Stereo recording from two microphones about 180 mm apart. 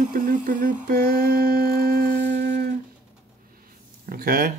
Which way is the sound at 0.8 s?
55° right (ahead or behind).